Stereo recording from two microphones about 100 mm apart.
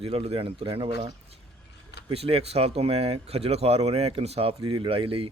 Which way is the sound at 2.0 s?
90° right.